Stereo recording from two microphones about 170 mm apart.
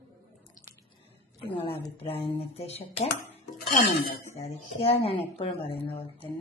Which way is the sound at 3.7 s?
60° left (ahead or behind).